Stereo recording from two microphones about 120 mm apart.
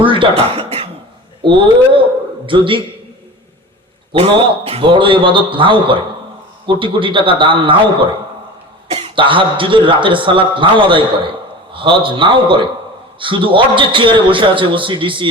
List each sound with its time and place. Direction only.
0.0 s speech: 45° right (ahead or behind)
4.1 s speech: 45° right (ahead or behind)